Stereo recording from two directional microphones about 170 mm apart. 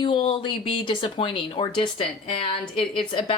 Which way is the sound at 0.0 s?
30° left (ahead or behind).